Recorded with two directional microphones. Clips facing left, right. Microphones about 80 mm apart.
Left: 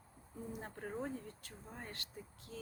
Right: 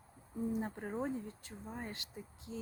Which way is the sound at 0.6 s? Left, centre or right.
Centre.